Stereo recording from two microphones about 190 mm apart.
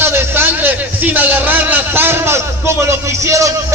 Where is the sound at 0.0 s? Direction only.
10° right (ahead or behind).